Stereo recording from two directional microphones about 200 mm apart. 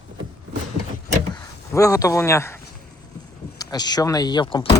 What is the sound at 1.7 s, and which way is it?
Speech, 15° left (ahead or behind).